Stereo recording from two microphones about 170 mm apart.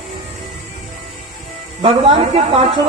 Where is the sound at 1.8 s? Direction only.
35° right (ahead or behind).